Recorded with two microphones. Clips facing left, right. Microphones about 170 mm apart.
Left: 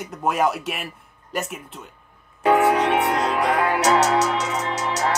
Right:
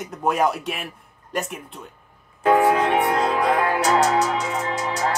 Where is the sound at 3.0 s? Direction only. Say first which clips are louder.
Right 1 dB; 75° left (ahead or behind).